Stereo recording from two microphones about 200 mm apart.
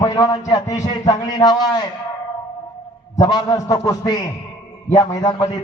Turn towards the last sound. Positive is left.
turn(degrees=20)  # may be behind; listen again after turning